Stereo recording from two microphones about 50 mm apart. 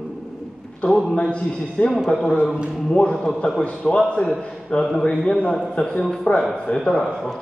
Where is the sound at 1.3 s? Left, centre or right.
Left.